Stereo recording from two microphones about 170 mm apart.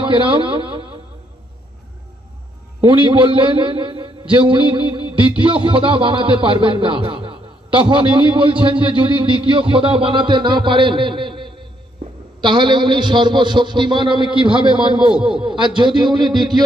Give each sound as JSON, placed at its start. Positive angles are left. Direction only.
{"t": 0.0, "sound": "a man's voice", "side_deg": -30}
{"t": 2.9, "sound": "a man's voice", "side_deg": -30}